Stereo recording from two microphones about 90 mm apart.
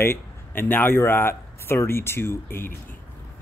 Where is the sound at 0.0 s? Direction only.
25° left (ahead or behind).